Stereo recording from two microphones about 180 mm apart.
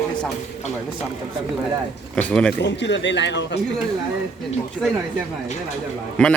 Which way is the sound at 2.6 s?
75° left (ahead or behind).